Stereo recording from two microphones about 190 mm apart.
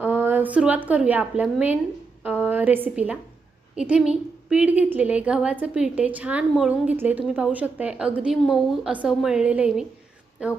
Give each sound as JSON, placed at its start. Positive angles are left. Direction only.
{"t": 0.0, "sound": "a woman's voice", "side_deg": -10}